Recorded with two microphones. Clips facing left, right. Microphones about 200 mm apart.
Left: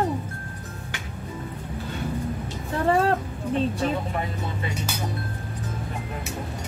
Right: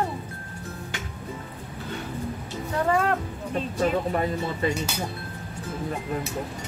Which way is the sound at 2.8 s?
30° left (ahead or behind).